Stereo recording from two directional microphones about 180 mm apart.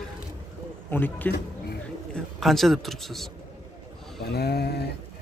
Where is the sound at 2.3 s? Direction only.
Centre (ahead or behind).